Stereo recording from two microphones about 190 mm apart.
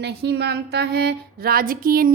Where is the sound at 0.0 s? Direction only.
60° right (ahead or behind).